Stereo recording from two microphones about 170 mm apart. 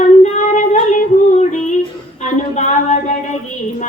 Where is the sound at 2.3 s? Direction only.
45° left (ahead or behind).